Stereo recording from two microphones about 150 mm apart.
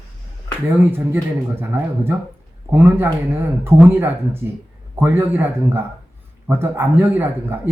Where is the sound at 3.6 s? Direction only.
15° right (ahead or behind).